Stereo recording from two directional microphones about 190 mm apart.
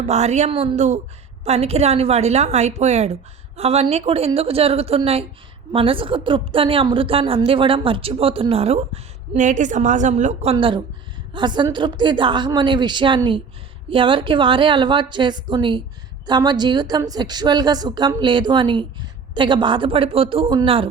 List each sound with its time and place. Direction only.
0.0 s a woman's voice: 35° right (ahead or behind)